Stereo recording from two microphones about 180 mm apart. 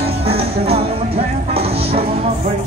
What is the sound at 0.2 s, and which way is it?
Music, 35° right (ahead or behind).